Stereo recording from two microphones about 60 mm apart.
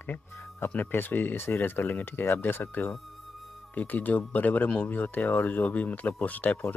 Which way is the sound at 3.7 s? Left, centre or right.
Left.